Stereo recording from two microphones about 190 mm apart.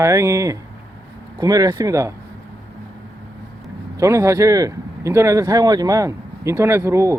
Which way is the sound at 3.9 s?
15° right (ahead or behind).